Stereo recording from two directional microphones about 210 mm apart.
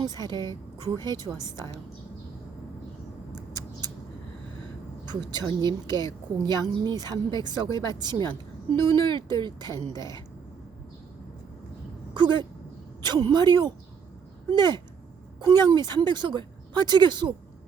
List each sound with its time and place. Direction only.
0.0 s speech: 20° right (ahead or behind)
5.0 s speech: 20° right (ahead or behind)
12.1 s speech: 20° right (ahead or behind)